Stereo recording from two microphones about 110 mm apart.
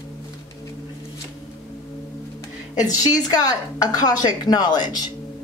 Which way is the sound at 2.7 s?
35° left (ahead or behind).